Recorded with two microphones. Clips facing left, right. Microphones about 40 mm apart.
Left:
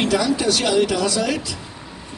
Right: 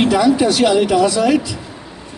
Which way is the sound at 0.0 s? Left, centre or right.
Right.